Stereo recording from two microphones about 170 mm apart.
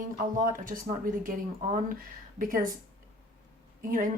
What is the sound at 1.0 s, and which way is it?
Speech, 55° right (ahead or behind).